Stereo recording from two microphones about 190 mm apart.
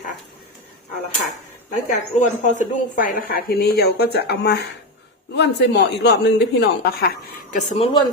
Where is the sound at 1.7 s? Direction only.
40° left (ahead or behind).